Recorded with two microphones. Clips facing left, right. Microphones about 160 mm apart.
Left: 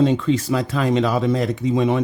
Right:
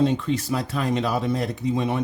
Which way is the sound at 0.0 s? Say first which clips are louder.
Left 4 dB; 90° left.